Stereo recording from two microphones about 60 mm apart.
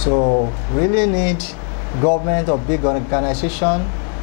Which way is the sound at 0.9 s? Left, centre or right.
Centre.